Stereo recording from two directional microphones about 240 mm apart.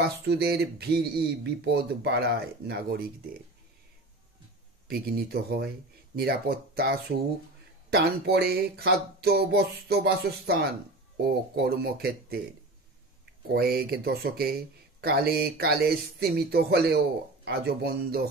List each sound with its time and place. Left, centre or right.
0.0 s speech: right
4.8 s speech: right